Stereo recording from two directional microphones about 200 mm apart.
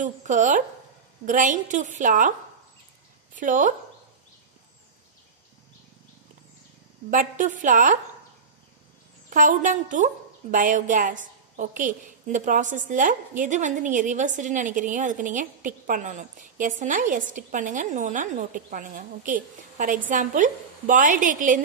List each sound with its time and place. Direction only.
0.0 s a woman's voice: 40° right (ahead or behind)
3.3 s a woman's voice: 40° right (ahead or behind)
7.1 s a woman's voice: 40° right (ahead or behind)
9.3 s a woman's voice: 40° right (ahead or behind)